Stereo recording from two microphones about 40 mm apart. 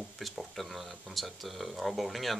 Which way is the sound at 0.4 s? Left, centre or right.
Centre.